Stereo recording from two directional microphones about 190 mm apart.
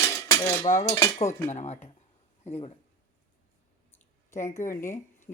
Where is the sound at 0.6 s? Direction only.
35° left (ahead or behind).